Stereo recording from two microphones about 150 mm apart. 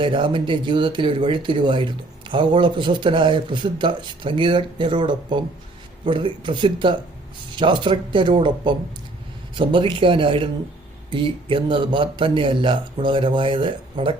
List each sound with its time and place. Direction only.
0.0 s speech: 35° right (ahead or behind)